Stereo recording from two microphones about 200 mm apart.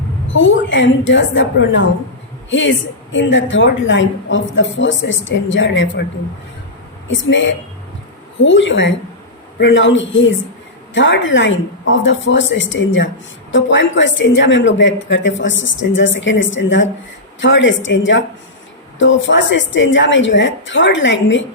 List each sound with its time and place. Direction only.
0.3 s a woman's voice: 70° left (ahead or behind)
7.1 s a woman's voice: 70° left (ahead or behind)